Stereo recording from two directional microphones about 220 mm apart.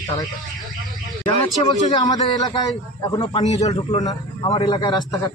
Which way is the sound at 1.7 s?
20° left (ahead or behind).